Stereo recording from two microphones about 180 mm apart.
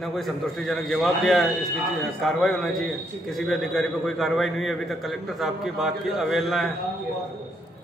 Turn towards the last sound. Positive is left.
turn(degrees=0)  # may be behind; listen again after turning